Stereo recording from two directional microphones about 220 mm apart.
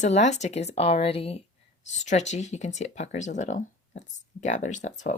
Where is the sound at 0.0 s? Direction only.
30° left (ahead or behind).